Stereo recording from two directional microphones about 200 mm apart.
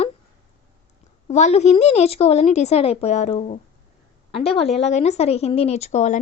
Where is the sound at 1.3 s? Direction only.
35° left (ahead or behind).